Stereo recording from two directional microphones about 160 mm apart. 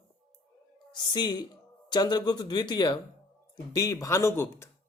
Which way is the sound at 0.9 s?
25° left (ahead or behind).